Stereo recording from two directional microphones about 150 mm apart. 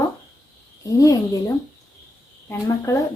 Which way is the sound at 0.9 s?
25° left (ahead or behind).